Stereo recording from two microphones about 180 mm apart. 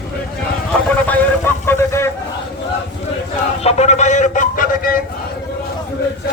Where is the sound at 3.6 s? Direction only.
35° left (ahead or behind).